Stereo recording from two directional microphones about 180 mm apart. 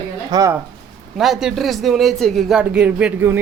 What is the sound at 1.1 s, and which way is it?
A man's voice, centre (ahead or behind).